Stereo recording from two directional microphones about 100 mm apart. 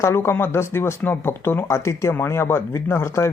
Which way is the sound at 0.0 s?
25° left (ahead or behind).